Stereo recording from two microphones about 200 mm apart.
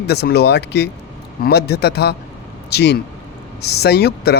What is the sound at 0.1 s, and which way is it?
A man's voice, 55° left (ahead or behind).